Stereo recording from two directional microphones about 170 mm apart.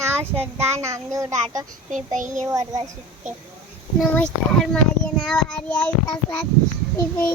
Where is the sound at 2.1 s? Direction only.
45° right (ahead or behind).